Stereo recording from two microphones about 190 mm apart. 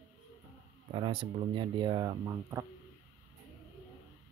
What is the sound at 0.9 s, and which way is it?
Speech, 25° right (ahead or behind).